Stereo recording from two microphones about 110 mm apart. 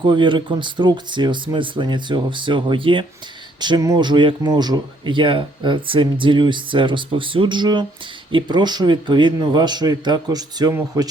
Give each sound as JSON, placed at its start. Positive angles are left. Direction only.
{"t": 0.0, "sound": "a man's voice", "side_deg": -45}
{"t": 10.7, "sound": "speech", "side_deg": -25}